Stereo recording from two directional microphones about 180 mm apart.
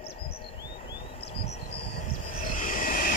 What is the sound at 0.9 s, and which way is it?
Vehicle, 30° left (ahead or behind).